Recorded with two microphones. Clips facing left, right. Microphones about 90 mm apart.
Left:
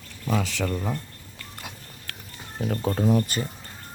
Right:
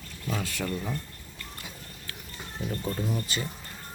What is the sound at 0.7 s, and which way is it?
Speech, 35° left (ahead or behind).